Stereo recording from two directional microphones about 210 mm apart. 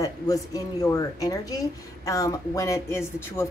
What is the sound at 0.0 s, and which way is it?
Speech, 15° left (ahead or behind).